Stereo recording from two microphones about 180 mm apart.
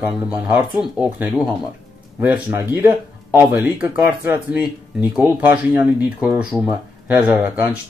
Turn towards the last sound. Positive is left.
turn(degrees=-15)  # may be behind; listen again after turning